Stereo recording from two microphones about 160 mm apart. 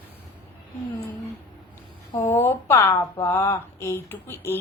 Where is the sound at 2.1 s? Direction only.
15° left (ahead or behind).